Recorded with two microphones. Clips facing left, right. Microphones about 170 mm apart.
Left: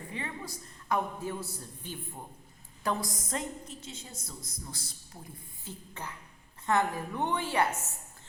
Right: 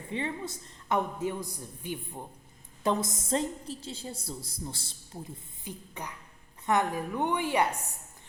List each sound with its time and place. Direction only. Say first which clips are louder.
0.1 s a woman's voice: right 7 dB; 25° right (ahead or behind)
5.6 s a woman's voice: right 2 dB; 15° right (ahead or behind)